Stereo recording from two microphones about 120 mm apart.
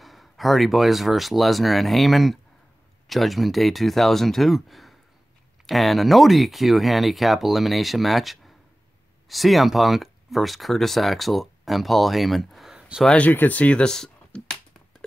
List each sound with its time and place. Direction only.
0.0 s speech: centre (ahead or behind)
13.0 s speech: 10° left (ahead or behind)